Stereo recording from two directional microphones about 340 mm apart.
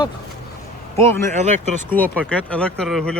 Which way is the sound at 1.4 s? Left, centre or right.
Right.